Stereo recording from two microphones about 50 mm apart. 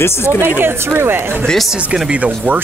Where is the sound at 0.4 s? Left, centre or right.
Right.